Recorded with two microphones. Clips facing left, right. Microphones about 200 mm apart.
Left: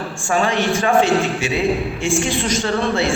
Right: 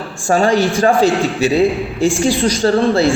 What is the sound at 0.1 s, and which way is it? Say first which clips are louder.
A man's voice: right 7 dB; 35° right (ahead or behind).